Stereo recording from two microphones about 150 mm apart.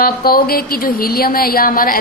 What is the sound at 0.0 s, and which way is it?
A woman's voice, 80° left.